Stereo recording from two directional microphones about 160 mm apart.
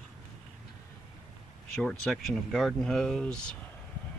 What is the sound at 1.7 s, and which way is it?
Speech, 5° left (ahead or behind).